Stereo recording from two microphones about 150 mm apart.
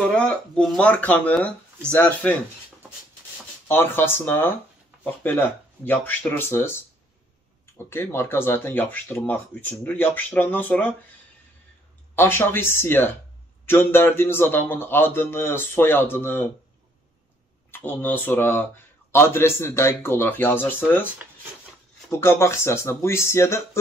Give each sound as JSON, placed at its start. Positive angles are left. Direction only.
{"t": 0.1, "sound": "speech", "side_deg": 5}
{"t": 3.6, "sound": "speech", "side_deg": 15}
{"t": 12.2, "sound": "speech", "side_deg": 15}
{"t": 17.6, "sound": "speech", "side_deg": 15}
{"t": 22.2, "sound": "speech", "side_deg": 15}